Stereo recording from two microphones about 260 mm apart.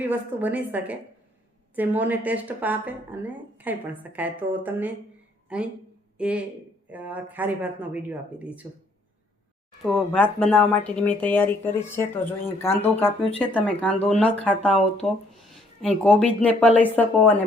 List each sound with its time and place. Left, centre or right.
0.0 s speech: centre
9.8 s speech: centre
13.1 s speech: left
13.4 s speech: centre